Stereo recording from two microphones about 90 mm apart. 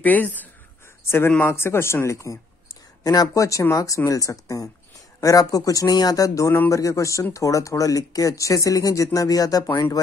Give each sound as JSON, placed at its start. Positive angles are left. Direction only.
{"t": 0.0, "sound": "speech", "side_deg": 20}
{"t": 3.0, "sound": "speech", "side_deg": 45}